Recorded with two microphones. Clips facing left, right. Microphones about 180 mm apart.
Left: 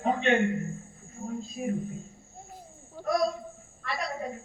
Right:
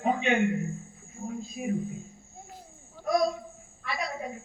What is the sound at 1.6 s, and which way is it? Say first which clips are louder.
Speech: left 1 dB; 10° right (ahead or behind).